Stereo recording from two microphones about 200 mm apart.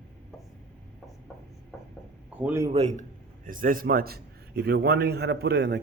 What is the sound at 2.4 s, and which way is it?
Speech, 15° right (ahead or behind).